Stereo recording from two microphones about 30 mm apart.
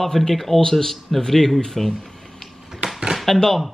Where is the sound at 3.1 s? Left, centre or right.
Centre.